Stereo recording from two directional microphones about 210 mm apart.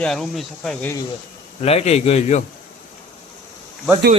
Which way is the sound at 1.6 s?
30° left (ahead or behind).